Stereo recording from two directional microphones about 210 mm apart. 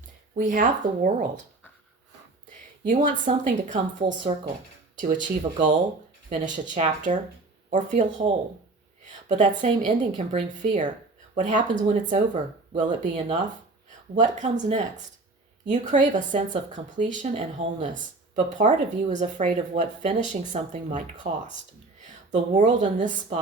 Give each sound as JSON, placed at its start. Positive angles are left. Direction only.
{"t": 0.3, "sound": "speech", "side_deg": -40}
{"t": 2.8, "sound": "speech", "side_deg": -35}
{"t": 9.3, "sound": "speech", "side_deg": -35}
{"t": 14.2, "sound": "speech", "side_deg": -35}